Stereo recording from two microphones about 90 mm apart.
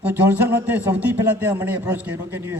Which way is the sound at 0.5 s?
15° right (ahead or behind).